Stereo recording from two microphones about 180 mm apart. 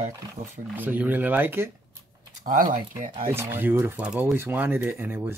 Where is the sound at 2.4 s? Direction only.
45° right (ahead or behind).